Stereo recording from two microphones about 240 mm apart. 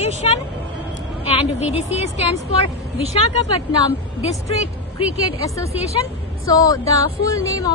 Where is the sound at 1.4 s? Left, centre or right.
Left.